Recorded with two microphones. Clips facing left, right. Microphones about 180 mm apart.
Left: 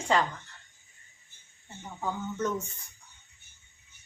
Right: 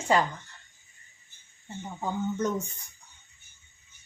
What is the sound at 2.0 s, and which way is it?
Speech, 15° right (ahead or behind).